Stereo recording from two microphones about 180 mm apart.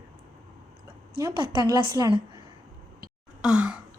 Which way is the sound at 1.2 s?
20° right (ahead or behind).